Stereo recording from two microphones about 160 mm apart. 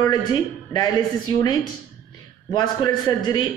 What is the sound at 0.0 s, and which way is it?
A man's voice, 25° left (ahead or behind).